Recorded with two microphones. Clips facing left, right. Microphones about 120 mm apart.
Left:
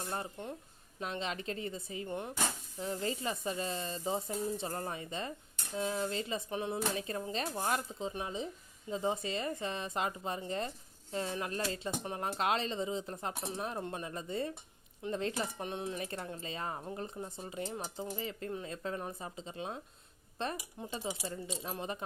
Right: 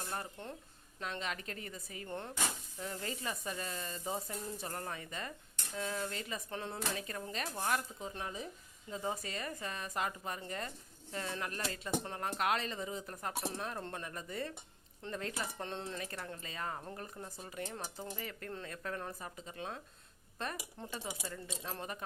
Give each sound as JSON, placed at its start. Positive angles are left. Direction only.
{"t": 0.1, "sound": "speech", "side_deg": 15}
{"t": 2.8, "sound": "speech", "side_deg": 25}
{"t": 15.5, "sound": "speech", "side_deg": 15}